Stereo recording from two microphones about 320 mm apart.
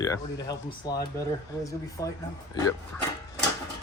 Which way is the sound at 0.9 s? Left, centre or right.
Centre.